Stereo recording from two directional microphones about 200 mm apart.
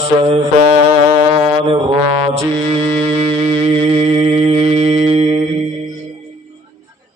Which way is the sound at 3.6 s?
30° right (ahead or behind).